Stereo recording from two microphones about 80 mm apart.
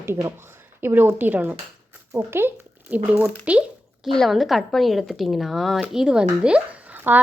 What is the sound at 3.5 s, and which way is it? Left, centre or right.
Speech, centre.